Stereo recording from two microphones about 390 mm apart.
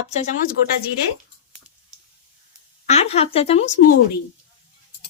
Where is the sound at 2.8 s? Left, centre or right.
Centre.